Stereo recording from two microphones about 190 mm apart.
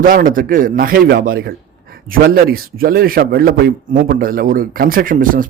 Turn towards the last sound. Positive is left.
turn(degrees=-45)  # may be behind; listen again after turning